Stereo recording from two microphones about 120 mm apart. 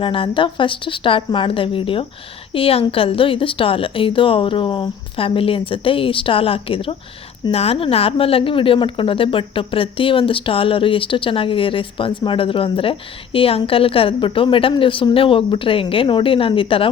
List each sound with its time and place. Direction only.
0.0 s speech: 45° left (ahead or behind)